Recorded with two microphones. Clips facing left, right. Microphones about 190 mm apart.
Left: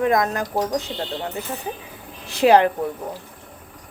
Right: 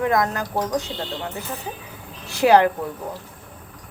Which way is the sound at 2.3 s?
20° left (ahead or behind).